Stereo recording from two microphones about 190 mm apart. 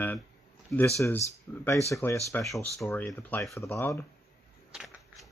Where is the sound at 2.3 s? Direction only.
5° left (ahead or behind).